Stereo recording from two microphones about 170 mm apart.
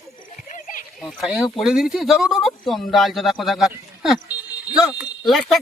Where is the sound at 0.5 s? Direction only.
50° left (ahead or behind).